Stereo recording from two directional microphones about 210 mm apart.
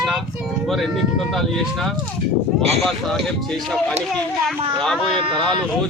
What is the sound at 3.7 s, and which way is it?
Speech, centre (ahead or behind).